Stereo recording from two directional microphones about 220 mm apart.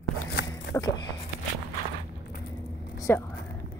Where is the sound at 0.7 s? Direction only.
50° left (ahead or behind).